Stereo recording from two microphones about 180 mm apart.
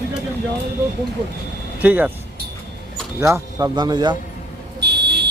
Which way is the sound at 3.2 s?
15° right (ahead or behind).